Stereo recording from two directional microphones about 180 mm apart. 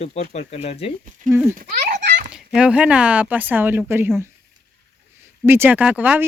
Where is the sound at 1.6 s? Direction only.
55° right (ahead or behind).